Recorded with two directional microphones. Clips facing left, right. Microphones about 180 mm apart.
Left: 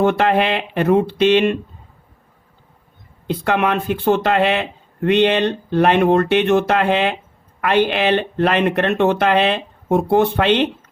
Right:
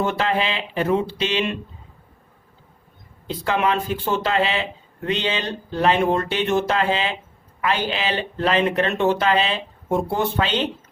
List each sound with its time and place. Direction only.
0.0 s speech: 60° left (ahead or behind)
3.2 s speech: 60° left (ahead or behind)